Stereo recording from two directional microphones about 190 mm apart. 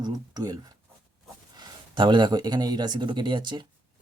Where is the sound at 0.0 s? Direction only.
20° right (ahead or behind).